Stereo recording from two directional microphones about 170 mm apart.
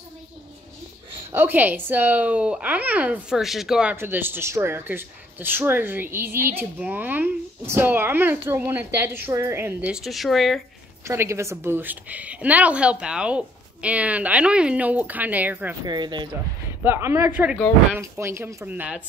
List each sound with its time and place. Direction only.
1.3 s speech: 10° right (ahead or behind)
11.1 s speech: 15° right (ahead or behind)
15.8 s speech: 25° right (ahead or behind)
16.8 s speech: 15° right (ahead or behind)